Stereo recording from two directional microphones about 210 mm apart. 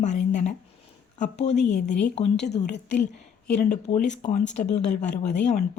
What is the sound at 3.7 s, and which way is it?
Speech, 35° left (ahead or behind).